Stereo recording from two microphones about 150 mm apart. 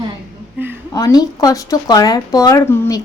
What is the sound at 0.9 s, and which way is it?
Speech, 25° left (ahead or behind).